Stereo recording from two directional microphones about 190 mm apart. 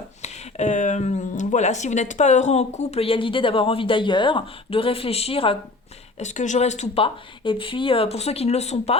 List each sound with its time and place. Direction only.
0.2 s speech: 35° left (ahead or behind)
6.1 s speech: 40° left (ahead or behind)